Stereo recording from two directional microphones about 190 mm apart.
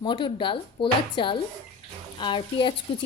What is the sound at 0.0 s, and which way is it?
A woman's voice, 25° left (ahead or behind).